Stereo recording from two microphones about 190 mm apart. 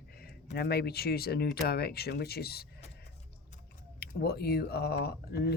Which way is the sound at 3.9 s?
55° left (ahead or behind).